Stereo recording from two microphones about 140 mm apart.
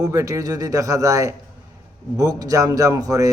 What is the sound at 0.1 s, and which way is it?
A man's voice, 25° right (ahead or behind).